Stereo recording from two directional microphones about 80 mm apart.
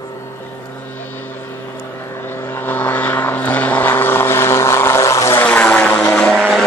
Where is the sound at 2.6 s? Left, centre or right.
Left.